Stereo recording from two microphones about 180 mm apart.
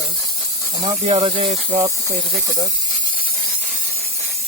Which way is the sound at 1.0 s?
30° right (ahead or behind).